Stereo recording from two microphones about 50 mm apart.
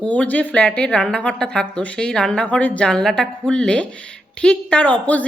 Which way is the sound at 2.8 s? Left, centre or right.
Centre.